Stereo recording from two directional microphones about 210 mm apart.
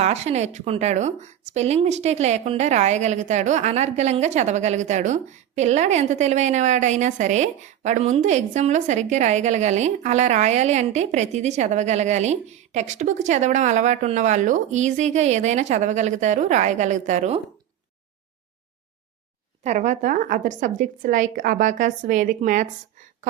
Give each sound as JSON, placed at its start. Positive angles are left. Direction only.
{"t": 0.0, "sound": "a woman's voice", "side_deg": -30}
{"t": 19.6, "sound": "a woman's voice", "side_deg": -35}